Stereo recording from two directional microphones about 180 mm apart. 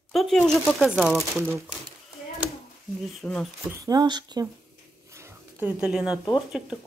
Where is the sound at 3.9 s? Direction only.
25° right (ahead or behind).